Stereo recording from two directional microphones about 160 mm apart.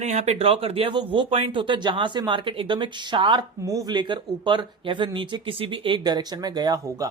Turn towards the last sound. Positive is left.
turn(degrees=-25)  # may be behind; listen again after turning